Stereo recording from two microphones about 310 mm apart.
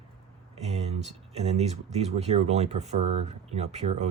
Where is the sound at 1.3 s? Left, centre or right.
Right.